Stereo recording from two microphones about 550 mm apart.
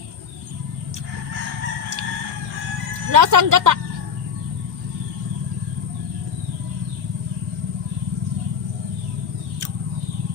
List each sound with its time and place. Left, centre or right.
3.1 s speech: right